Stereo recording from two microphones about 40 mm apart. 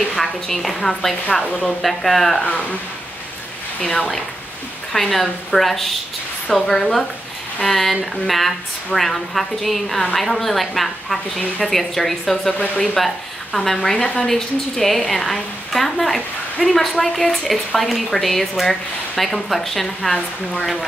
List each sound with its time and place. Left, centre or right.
0.1 s a woman's voice: centre
2.4 s speech: left
4.9 s a woman's voice: centre
13.9 s speech: left
14.2 s a woman's voice: centre